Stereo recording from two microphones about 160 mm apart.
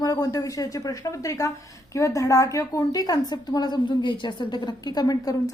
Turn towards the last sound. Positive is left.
turn(degrees=20)  # may be behind; listen again after turning